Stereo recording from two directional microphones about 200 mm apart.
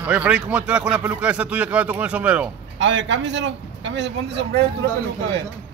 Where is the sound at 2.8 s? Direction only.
65° right (ahead or behind).